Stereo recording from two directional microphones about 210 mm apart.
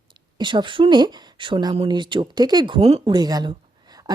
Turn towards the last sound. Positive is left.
turn(degrees=-20)  # may be behind; listen again after turning